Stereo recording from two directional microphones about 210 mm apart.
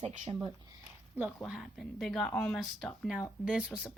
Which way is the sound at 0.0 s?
30° right (ahead or behind).